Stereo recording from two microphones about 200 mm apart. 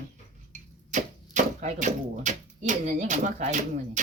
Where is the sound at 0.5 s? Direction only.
35° right (ahead or behind).